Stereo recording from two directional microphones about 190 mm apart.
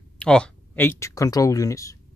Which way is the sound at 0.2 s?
5° left (ahead or behind).